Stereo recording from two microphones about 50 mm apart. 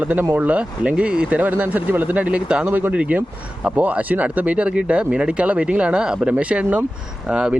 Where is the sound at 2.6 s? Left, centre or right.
Right.